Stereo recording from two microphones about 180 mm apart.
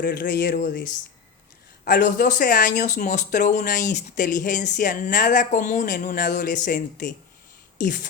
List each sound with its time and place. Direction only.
0.0 s speech: 60° left (ahead or behind)
1.8 s speech: 50° left (ahead or behind)